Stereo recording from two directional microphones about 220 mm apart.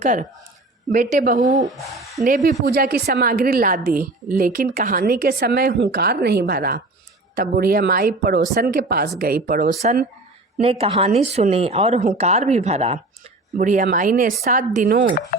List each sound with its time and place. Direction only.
0.0 s speech: 35° right (ahead or behind)
1.7 s speech: centre (ahead or behind)
2.2 s a woman's voice: 40° right (ahead or behind)
10.6 s speech: 25° right (ahead or behind)